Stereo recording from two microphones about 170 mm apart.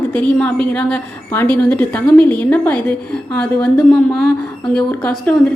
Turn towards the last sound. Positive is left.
turn(degrees=10)  # may be behind; listen again after turning